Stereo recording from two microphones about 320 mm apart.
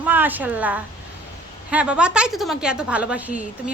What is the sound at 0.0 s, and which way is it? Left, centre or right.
A woman's voice, centre.